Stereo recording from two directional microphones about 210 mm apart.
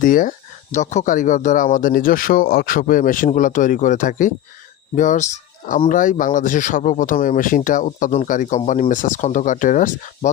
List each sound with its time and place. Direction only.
0.0 s speech: 40° left (ahead or behind)